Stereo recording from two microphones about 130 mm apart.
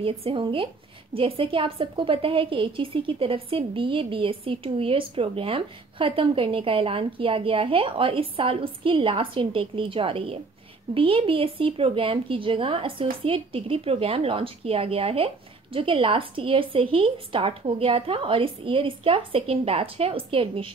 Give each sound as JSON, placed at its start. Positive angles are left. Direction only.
{"t": 0.0, "sound": "speech", "side_deg": -45}